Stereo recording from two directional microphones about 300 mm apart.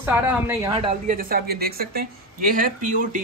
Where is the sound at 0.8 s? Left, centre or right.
Right.